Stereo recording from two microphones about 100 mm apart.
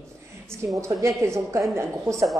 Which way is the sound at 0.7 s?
30° right (ahead or behind).